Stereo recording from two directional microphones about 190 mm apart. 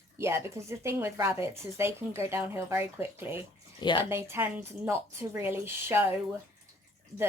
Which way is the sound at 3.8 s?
25° left (ahead or behind).